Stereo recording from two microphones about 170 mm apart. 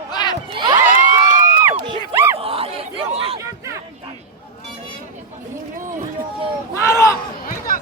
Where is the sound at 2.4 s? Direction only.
35° right (ahead or behind).